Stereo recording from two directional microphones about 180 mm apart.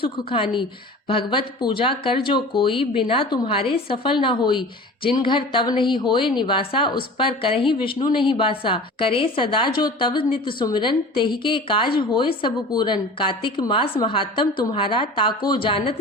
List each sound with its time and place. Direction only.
0.0 s a woman's voice: 30° left (ahead or behind)